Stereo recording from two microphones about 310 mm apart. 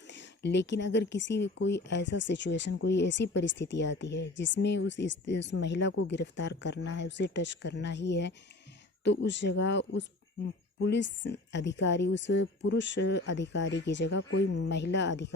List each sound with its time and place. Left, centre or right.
0.1 s speech: left